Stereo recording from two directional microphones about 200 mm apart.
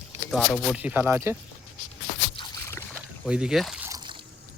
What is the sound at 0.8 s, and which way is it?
Speech, 10° right (ahead or behind).